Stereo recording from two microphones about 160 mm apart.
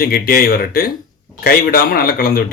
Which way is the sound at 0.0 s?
65° left (ahead or behind).